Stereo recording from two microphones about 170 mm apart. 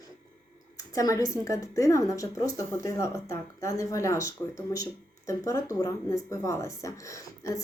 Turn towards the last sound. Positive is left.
turn(degrees=20)  # may be behind; listen again after turning